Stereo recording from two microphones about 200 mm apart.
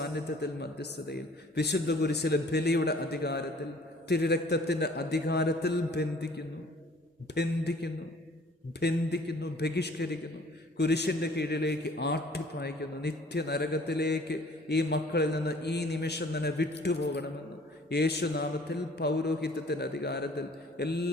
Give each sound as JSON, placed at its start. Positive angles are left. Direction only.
{"t": 0.3, "sound": "a man's voice", "side_deg": 55}